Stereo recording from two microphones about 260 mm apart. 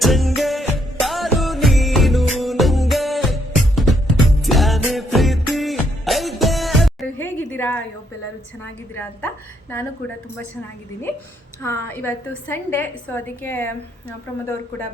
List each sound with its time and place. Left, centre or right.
0.0 s music: centre
9.0 s a woman's voice: centre
11.6 s a woman's voice: centre